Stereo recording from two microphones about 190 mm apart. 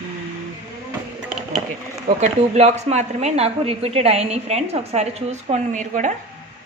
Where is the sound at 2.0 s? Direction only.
40° right (ahead or behind).